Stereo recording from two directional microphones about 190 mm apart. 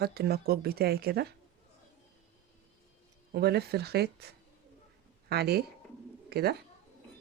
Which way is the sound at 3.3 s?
60° right (ahead or behind).